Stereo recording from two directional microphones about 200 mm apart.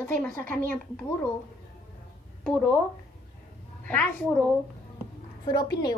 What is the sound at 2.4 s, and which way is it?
Speech, centre (ahead or behind).